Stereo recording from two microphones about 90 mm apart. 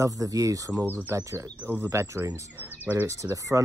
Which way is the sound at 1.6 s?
20° right (ahead or behind).